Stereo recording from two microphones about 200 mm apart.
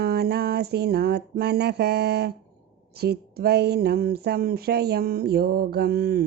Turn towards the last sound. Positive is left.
turn(degrees=-50)  # may be behind; listen again after turning